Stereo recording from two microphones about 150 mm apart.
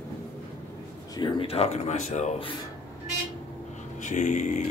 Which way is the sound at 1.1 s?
35° left (ahead or behind).